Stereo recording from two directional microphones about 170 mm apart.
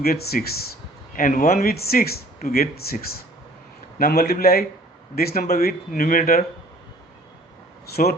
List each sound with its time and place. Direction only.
0.0 s speech: 65° left (ahead or behind)
1.1 s a man's voice: 55° left (ahead or behind)
7.9 s speech: 65° left (ahead or behind)